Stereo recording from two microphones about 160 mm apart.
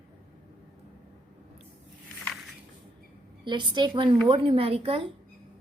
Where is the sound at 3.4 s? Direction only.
30° right (ahead or behind).